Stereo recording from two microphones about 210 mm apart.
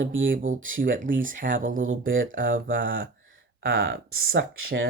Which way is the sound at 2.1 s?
65° right (ahead or behind).